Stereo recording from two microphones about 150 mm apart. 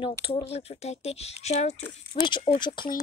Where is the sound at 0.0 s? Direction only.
35° left (ahead or behind).